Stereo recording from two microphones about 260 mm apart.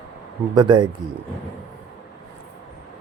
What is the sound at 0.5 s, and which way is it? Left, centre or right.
Speech, centre.